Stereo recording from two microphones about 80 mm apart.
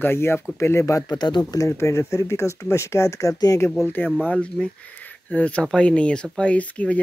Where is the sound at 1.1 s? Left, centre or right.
Left.